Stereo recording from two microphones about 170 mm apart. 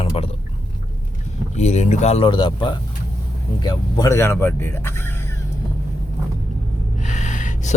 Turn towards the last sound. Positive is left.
turn(degrees=45)  # may be behind; listen again after turning